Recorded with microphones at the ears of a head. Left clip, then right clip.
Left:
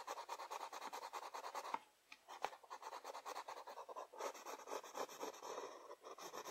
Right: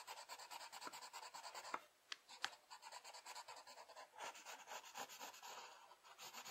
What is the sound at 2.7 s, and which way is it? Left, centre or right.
Rub, left.